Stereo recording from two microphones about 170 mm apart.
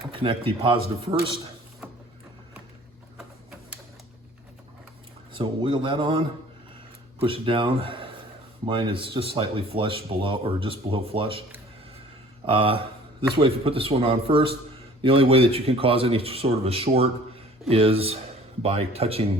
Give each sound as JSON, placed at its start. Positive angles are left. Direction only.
{"t": 0.1, "sound": "speech", "side_deg": -30}
{"t": 1.8, "sound": "printer", "side_deg": -5}
{"t": 3.2, "sound": "a sound", "side_deg": 0}
{"t": 5.3, "sound": "a man's voice", "side_deg": -30}
{"t": 12.5, "sound": "speech", "side_deg": -30}